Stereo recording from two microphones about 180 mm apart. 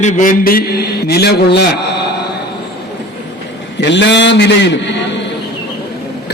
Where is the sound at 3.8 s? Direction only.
75° left (ahead or behind).